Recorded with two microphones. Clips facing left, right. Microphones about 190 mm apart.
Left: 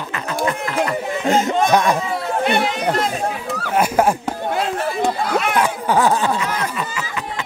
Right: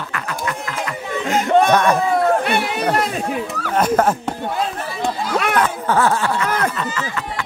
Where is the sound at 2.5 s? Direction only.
60° right (ahead or behind).